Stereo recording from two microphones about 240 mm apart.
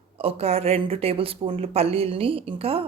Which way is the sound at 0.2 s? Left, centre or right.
Right.